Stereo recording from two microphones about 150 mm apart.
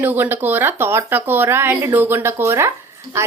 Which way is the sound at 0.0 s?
15° right (ahead or behind).